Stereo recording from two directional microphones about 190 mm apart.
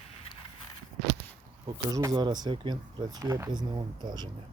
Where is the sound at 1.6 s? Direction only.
20° right (ahead or behind).